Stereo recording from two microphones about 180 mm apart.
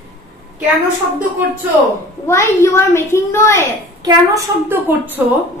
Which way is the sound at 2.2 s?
15° left (ahead or behind).